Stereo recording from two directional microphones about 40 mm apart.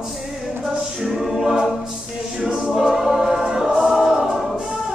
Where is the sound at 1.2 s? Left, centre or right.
Centre.